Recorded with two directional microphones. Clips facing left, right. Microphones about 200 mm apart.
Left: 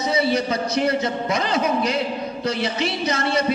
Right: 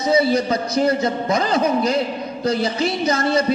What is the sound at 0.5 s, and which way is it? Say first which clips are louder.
A man's voice: right 3 dB; 35° right (ahead or behind).